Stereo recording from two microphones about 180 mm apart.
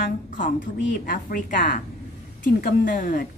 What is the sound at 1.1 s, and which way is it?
A woman's voice, 50° left (ahead or behind).